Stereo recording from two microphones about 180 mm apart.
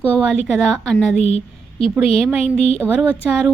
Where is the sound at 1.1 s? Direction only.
35° left (ahead or behind).